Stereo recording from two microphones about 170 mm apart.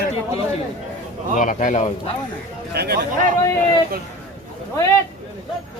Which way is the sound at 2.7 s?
70° right (ahead or behind).